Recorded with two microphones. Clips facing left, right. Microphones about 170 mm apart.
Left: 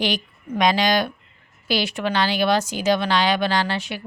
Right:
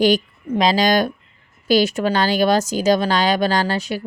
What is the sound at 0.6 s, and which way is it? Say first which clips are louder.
Speech: right 2 dB; 30° right (ahead or behind).